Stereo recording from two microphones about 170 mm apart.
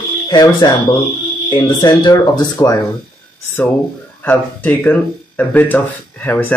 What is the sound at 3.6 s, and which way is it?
Speech, 10° left (ahead or behind).